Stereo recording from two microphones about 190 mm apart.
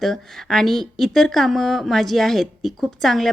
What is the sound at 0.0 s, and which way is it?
A woman's voice, centre (ahead or behind).